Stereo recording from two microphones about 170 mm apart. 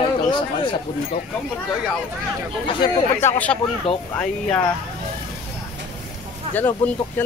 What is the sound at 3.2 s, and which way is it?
Speech, 15° left (ahead or behind).